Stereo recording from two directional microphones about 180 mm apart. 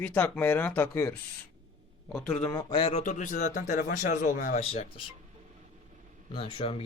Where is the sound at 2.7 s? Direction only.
30° left (ahead or behind).